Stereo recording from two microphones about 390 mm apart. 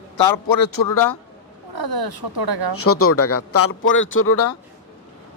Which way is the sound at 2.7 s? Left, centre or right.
Left.